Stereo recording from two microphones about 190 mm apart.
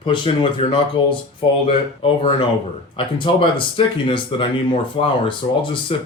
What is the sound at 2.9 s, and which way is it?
Speech, 25° left (ahead or behind).